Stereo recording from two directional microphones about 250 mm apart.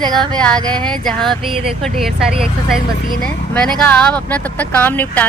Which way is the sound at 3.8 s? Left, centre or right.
Centre.